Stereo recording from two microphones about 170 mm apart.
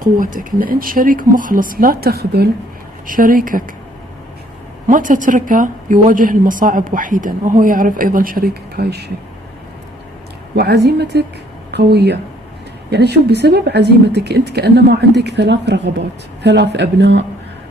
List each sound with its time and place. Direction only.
0.2 s speech: 55° right (ahead or behind)
3.1 s speech: 55° right (ahead or behind)
4.8 s a woman's voice: 50° right (ahead or behind); by 9.0 s 65° right (ahead or behind)
10.5 s speech: 70° right (ahead or behind); by 17.2 s 90° right